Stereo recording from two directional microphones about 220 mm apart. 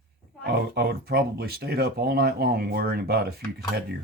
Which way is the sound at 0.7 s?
45° right (ahead or behind).